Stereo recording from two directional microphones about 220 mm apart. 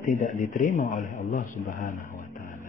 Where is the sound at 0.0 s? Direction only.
35° left (ahead or behind).